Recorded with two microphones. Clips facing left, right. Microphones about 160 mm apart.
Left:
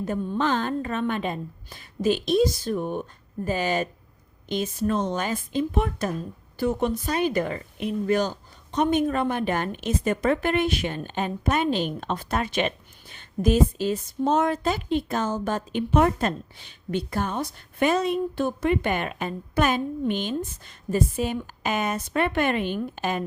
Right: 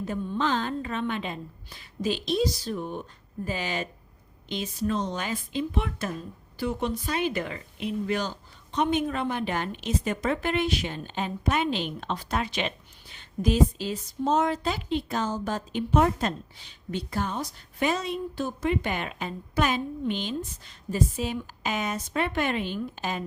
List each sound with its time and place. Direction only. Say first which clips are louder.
0.0 s a woman's voice: left 3 dB; 50° left (ahead or behind)